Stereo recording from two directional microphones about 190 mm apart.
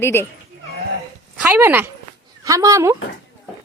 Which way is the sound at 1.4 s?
10° right (ahead or behind).